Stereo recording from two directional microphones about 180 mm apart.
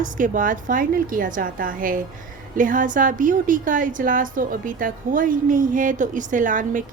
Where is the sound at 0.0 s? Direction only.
45° right (ahead or behind).